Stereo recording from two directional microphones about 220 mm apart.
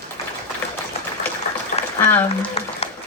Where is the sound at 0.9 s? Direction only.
30° left (ahead or behind).